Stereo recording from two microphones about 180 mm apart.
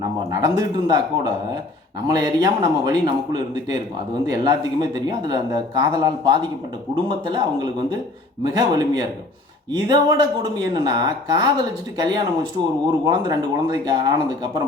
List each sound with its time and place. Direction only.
0.0 s speech: 20° right (ahead or behind)